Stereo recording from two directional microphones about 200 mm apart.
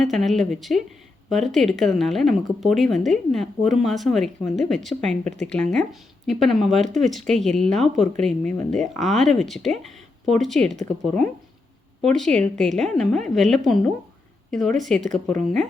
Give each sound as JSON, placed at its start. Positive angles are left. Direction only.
{"t": 0.0, "sound": "speech", "side_deg": 0}